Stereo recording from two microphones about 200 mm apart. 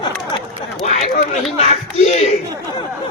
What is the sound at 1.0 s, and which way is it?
Speech, 45° left (ahead or behind).